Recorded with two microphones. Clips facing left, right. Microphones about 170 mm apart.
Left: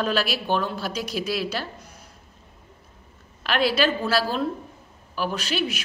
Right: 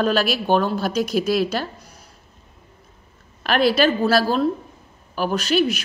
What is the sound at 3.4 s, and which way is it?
A woman's voice, 45° right (ahead or behind).